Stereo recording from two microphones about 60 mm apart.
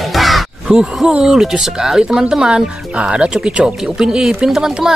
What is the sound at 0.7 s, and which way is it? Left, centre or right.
Speech, centre.